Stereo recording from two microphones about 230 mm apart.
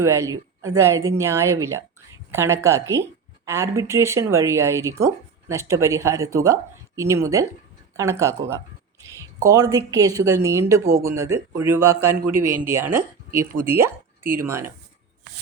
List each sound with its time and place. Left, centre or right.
0.0 s speech: centre
12.3 s speech: right
12.6 s speech: centre